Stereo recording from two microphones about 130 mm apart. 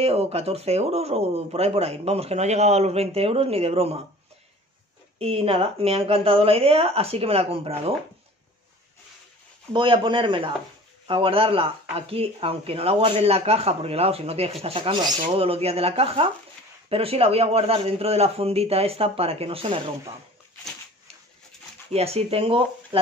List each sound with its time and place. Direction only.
0.0 s speech: 50° right (ahead or behind)
5.2 s speech: 45° right (ahead or behind)
9.7 s speech: 40° right (ahead or behind)
21.9 s speech: 50° right (ahead or behind)